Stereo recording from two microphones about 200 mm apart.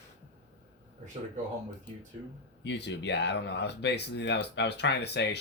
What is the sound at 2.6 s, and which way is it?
Speech, 60° left (ahead or behind).